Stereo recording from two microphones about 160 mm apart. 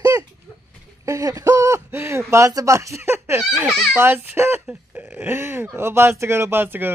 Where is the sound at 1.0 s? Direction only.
20° right (ahead or behind).